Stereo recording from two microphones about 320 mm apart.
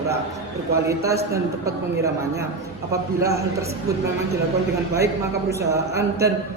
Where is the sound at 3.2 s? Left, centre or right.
Centre.